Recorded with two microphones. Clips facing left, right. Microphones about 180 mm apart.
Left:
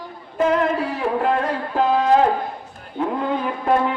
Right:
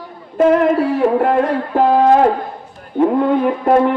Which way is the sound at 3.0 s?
55° right (ahead or behind).